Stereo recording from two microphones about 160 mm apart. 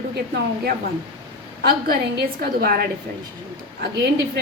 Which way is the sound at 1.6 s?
75° right (ahead or behind).